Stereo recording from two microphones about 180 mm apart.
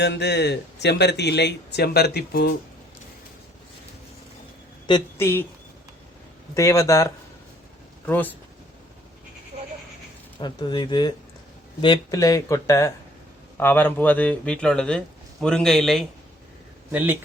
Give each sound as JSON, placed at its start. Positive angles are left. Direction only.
{"t": 0.0, "sound": "speech", "side_deg": 70}
{"t": 4.9, "sound": "speech", "side_deg": 25}
{"t": 5.2, "sound": "speech", "side_deg": 10}
{"t": 6.5, "sound": "speech", "side_deg": 15}
{"t": 9.5, "sound": "a sound", "side_deg": -40}
{"t": 10.4, "sound": "speech", "side_deg": 25}
{"t": 16.9, "sound": "speech", "side_deg": -10}